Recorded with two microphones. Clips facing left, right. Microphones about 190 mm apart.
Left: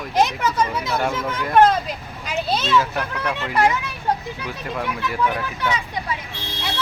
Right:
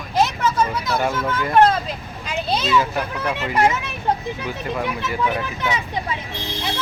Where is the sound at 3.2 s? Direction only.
20° right (ahead or behind).